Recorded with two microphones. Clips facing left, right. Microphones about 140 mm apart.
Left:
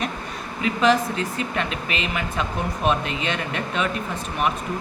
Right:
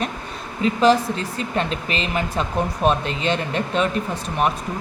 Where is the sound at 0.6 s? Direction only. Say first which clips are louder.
Right 3 dB; 35° right (ahead or behind).